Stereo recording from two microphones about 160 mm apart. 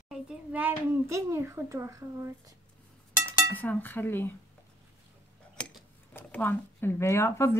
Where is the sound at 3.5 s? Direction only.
10° left (ahead or behind).